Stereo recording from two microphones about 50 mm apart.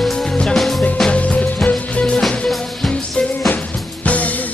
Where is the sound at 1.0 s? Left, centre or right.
Left.